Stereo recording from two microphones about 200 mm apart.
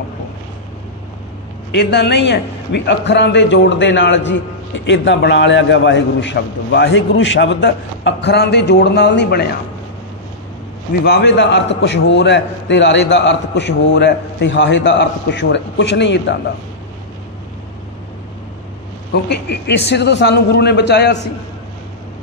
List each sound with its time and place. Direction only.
1.7 s a man's voice: 60° left (ahead or behind)
11.1 s a man's voice: 60° left (ahead or behind)
19.1 s a man's voice: 55° left (ahead or behind)